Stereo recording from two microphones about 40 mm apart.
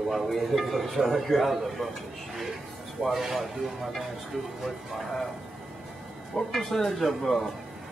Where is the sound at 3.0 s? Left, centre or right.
Centre.